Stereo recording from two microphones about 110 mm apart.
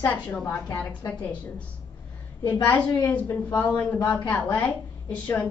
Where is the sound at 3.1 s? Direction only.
20° left (ahead or behind).